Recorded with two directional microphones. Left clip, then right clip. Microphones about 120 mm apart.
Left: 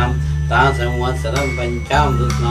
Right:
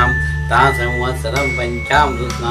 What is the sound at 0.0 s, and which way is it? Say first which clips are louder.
Music: right 7 dB; 20° right (ahead or behind).